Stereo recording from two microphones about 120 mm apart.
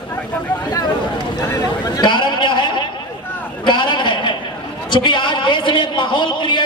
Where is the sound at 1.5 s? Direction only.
30° left (ahead or behind).